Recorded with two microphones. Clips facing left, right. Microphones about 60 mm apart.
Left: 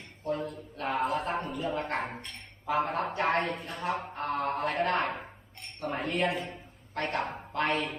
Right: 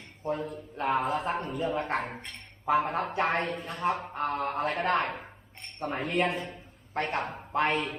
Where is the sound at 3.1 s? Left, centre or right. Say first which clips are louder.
Even; centre.